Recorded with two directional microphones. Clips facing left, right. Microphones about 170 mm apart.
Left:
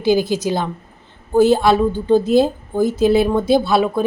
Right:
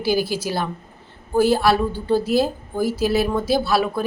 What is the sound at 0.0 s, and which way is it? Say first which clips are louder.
A woman's voice: left 5 dB; 20° left (ahead or behind).